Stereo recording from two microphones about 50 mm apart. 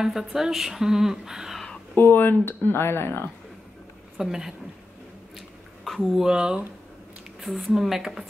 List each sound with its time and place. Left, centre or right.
0.0 s speech: centre
2.0 s speech: left
4.2 s speech: centre
5.9 s speech: centre
6.2 s speech: centre
7.3 s speech: centre